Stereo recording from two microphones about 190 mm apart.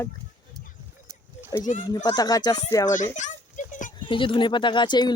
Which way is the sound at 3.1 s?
40° left (ahead or behind).